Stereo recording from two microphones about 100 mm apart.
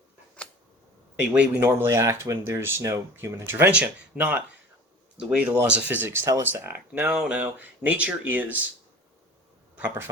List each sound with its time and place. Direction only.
1.2 s speech: 20° right (ahead or behind)